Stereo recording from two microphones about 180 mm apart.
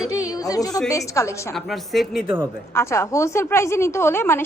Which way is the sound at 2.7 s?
15° left (ahead or behind).